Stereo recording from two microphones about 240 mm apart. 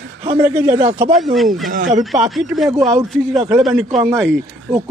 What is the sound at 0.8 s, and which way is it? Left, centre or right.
Speech, right.